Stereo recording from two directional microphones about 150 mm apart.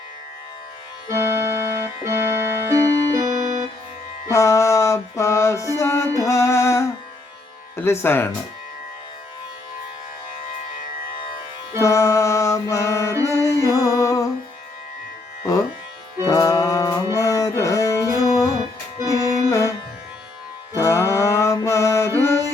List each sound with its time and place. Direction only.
1.0 s music: 20° right (ahead or behind)
4.3 s music: 20° left (ahead or behind)
7.8 s speech: 15° left (ahead or behind)
11.8 s music: 20° left (ahead or behind)
16.2 s music: 25° left (ahead or behind)
20.7 s music: 20° left (ahead or behind)